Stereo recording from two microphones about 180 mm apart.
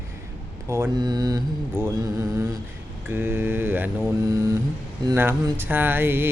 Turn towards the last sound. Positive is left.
turn(degrees=-10)  # may be behind; listen again after turning